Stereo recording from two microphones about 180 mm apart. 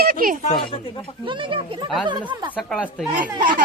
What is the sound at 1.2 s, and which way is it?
Speech, 25° right (ahead or behind).